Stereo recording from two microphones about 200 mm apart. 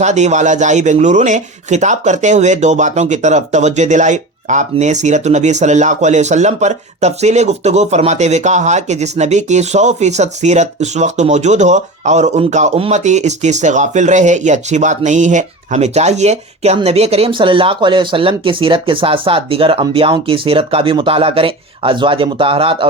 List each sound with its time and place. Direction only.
0.0 s speech: 35° right (ahead or behind)